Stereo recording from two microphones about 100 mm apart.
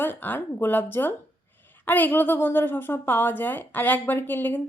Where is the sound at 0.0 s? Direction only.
20° left (ahead or behind).